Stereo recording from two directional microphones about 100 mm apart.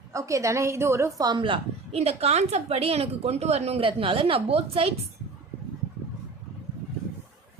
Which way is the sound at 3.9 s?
60° right (ahead or behind).